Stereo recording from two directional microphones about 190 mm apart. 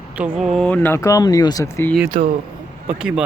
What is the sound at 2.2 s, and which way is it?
Speech, 40° right (ahead or behind).